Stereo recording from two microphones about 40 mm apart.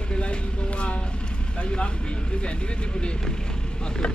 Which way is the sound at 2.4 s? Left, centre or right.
Left.